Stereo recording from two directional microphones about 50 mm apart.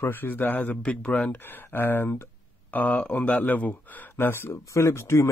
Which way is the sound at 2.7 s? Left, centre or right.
Left.